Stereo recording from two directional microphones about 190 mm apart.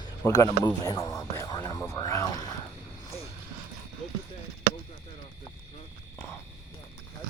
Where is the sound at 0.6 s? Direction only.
20° left (ahead or behind).